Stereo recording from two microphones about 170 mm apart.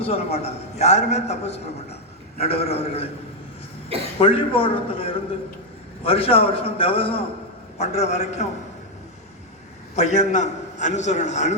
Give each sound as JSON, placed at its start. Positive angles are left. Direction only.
{"t": 0.0, "sound": "a man's voice", "side_deg": 35}
{"t": 4.2, "sound": "a man's voice", "side_deg": 30}
{"t": 9.9, "sound": "a man's voice", "side_deg": 40}